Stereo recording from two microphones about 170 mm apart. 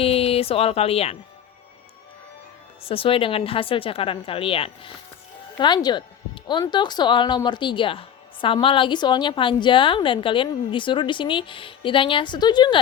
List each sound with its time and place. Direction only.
0.0 s speech: 35° left (ahead or behind)
2.8 s speech: 30° left (ahead or behind)